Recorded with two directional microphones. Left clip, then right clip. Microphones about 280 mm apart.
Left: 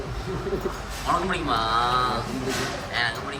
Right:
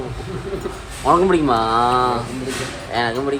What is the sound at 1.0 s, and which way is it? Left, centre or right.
Speech, centre.